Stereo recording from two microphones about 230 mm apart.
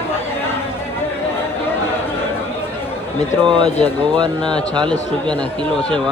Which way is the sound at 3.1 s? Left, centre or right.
Centre.